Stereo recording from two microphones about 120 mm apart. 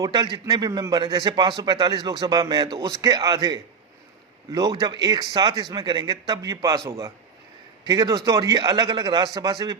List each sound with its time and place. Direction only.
0.0 s a man's voice: 35° right (ahead or behind)
4.8 s a man's voice: 35° right (ahead or behind)